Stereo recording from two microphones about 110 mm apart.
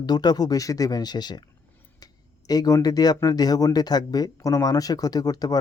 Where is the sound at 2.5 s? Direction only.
35° left (ahead or behind).